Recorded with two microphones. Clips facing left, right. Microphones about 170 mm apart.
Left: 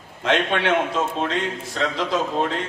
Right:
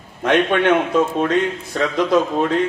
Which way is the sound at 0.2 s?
50° right (ahead or behind).